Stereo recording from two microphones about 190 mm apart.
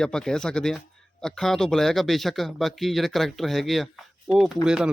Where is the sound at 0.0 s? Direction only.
5° left (ahead or behind).